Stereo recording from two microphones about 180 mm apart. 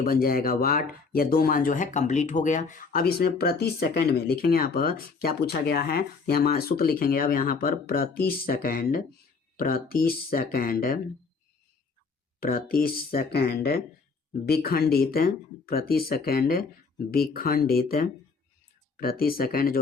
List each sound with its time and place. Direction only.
0.0 s speech: 55° left (ahead or behind)
12.4 s speech: 55° left (ahead or behind)